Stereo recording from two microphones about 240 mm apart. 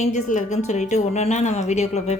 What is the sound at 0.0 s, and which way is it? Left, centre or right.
A woman's voice, left.